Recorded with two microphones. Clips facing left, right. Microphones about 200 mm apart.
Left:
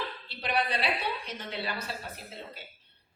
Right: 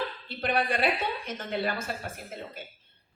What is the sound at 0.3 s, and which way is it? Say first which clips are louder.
A woman's voice: right 3 dB; 50° right (ahead or behind).